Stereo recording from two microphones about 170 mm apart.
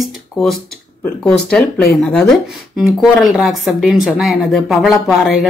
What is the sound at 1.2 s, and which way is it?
Speech, 5° left (ahead or behind).